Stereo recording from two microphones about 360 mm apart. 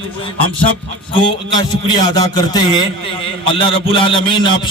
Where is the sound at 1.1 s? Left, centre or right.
Centre.